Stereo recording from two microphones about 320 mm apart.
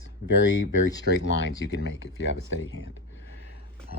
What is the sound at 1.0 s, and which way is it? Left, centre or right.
Speech, left.